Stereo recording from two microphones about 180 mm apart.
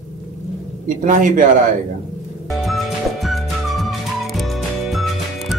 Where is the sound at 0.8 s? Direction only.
45° right (ahead or behind).